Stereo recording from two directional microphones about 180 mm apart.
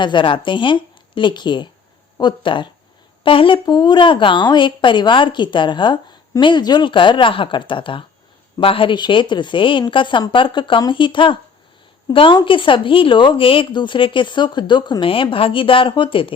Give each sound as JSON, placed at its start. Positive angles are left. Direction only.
{"t": 0.0, "sound": "a woman's voice", "side_deg": 25}